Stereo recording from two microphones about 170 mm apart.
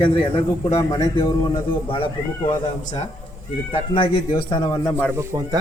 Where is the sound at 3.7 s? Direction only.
30° left (ahead or behind).